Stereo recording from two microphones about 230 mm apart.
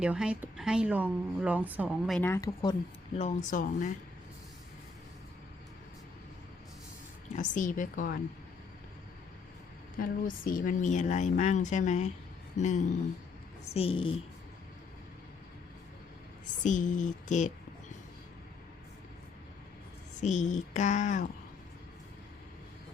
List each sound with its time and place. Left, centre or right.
0.0 s a woman's voice: centre
3.2 s speech: left
7.3 s speech: left
10.0 s a woman's voice: left
16.6 s speech: left
20.2 s speech: left